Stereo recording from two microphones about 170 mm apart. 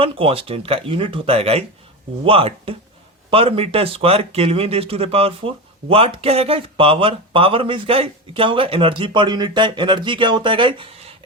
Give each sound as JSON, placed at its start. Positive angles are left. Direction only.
{"t": 0.0, "sound": "speech", "side_deg": -35}